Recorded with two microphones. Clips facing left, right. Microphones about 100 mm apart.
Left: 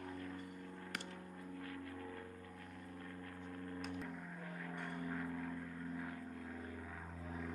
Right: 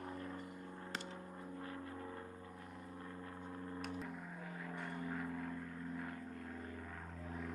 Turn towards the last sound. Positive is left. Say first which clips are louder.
# even
turn(degrees=0)  # may be behind; listen again after turning